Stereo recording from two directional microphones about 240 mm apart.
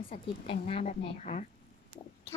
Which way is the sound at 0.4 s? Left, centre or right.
Left.